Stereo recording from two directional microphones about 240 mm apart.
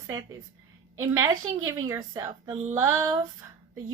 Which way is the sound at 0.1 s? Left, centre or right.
Centre.